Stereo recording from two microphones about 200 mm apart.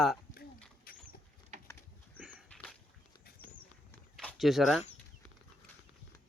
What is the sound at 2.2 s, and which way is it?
Dog, 5° right (ahead or behind).